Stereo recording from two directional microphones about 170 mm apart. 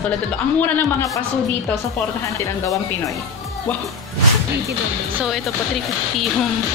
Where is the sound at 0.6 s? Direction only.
15° left (ahead or behind).